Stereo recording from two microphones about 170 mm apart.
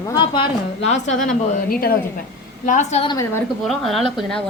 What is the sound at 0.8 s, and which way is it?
A woman's voice, 45° left (ahead or behind).